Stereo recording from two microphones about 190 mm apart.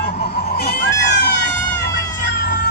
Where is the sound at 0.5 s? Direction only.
55° left (ahead or behind).